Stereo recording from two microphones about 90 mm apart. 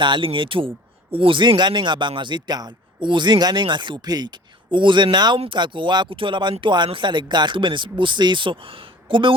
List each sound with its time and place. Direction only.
0.0 s a man's voice: 65° right (ahead or behind)